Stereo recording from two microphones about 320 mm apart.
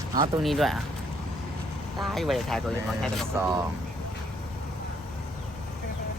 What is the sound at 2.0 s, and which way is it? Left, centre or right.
Speech, centre.